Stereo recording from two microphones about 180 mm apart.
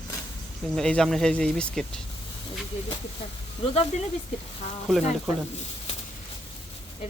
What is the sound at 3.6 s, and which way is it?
Speech, 35° left (ahead or behind).